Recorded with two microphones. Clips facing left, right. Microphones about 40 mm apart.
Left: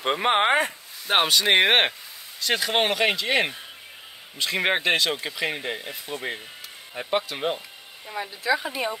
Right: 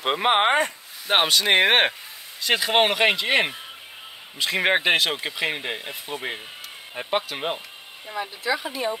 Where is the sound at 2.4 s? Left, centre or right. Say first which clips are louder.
Right 3 dB; centre.